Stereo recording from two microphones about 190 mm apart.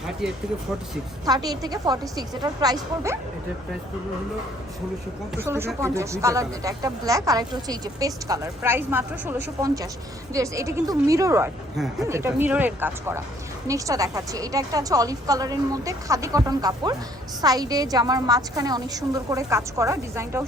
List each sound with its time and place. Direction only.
1.2 s a woman's voice: 20° right (ahead or behind)
5.4 s a woman's voice: 15° right (ahead or behind)